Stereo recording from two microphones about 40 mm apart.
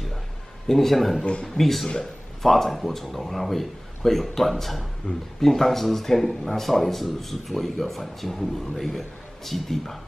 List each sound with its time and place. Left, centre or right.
0.7 s speech: centre
1.2 s a man's voice: left
1.5 s speech: centre
5.1 s a man's voice: left
5.4 s speech: centre